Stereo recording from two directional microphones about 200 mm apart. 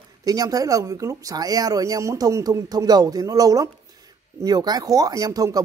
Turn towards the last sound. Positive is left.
turn(degrees=-15)  # may be behind; listen again after turning